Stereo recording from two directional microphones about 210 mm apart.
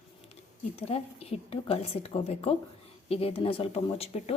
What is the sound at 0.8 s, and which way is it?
Speech, 30° left (ahead or behind).